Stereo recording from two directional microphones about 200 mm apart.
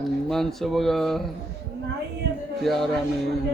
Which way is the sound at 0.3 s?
Centre (ahead or behind).